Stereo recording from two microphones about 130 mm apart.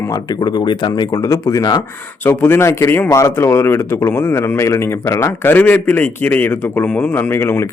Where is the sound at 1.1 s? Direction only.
25° left (ahead or behind).